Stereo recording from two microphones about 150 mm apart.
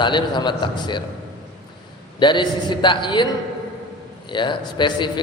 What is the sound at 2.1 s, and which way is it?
A man's voice, 30° left (ahead or behind).